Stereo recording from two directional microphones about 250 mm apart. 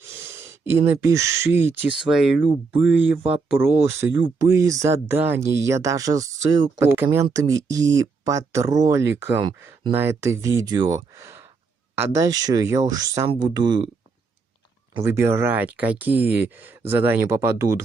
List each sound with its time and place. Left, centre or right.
0.0 s speech: centre
3.2 s speech: right
3.5 s speech: centre
15.0 s speech: centre